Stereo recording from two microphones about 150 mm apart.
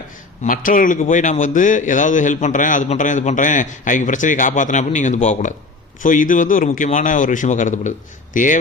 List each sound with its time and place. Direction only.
0.4 s a man's voice: 65° left (ahead or behind)